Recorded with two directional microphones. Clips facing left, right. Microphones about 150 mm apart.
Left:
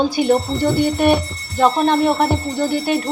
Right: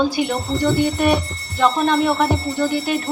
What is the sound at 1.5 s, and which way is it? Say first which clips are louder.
Speech: left 2 dB; 40° left (ahead or behind).